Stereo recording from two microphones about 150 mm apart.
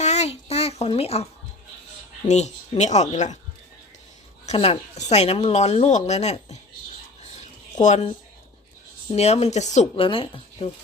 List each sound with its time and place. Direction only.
0.0 s a sound: 45° left (ahead or behind)
2.2 s speech: 50° left (ahead or behind)
4.4 s speech: 40° left (ahead or behind)
7.8 s speech: 50° left (ahead or behind)
9.1 s speech: 45° left (ahead or behind)
9.9 s speech: 35° left (ahead or behind)